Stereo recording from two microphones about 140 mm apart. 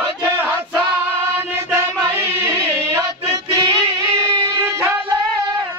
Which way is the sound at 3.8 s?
35° right (ahead or behind).